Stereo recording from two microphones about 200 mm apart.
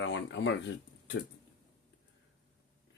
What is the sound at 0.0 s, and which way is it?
Speech, 65° left (ahead or behind).